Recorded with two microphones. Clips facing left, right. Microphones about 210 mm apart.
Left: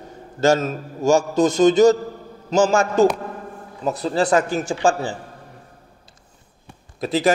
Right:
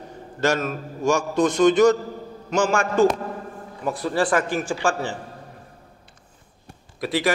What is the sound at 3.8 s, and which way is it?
Speech, 25° left (ahead or behind).